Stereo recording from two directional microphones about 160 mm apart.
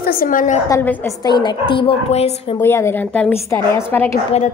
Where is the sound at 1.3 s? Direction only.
30° left (ahead or behind).